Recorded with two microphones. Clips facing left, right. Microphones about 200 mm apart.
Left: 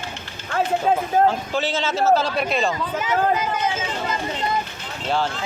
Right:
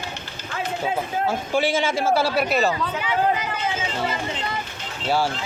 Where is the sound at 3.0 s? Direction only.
45° left (ahead or behind).